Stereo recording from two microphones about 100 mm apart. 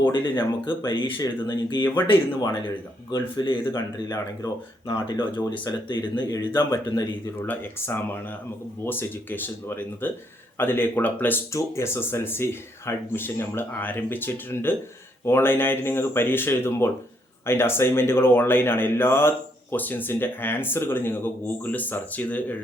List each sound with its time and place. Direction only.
0.1 s speech: 50° left (ahead or behind)
3.1 s speech: 50° left (ahead or behind)
7.4 s speech: 20° left (ahead or behind)